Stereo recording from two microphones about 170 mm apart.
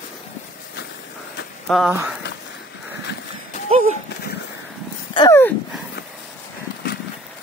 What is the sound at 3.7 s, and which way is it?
Speech, 40° right (ahead or behind).